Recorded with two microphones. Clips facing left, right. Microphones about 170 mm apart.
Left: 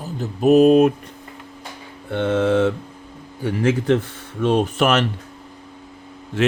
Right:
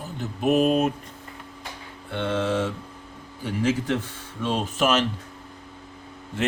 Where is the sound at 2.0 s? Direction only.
50° left (ahead or behind).